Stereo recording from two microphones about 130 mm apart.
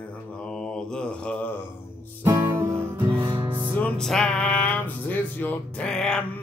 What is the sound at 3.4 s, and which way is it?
Music, 35° right (ahead or behind).